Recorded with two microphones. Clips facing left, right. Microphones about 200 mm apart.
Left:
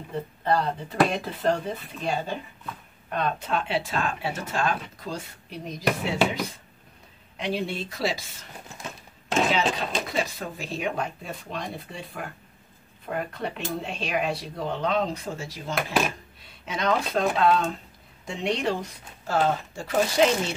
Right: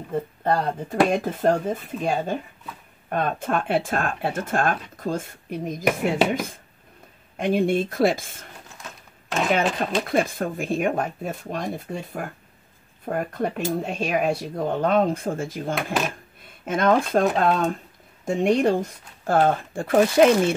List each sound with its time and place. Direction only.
0.4 s speech: 50° right (ahead or behind)
9.5 s speech: 55° right (ahead or behind)